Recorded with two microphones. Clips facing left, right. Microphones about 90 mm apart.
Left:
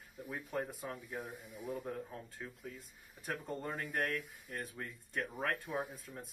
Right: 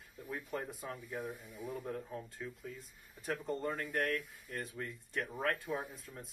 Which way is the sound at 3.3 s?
10° left (ahead or behind).